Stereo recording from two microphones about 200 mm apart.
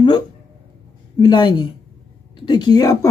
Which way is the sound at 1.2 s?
25° left (ahead or behind).